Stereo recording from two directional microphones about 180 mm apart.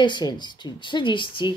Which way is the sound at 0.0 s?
25° left (ahead or behind).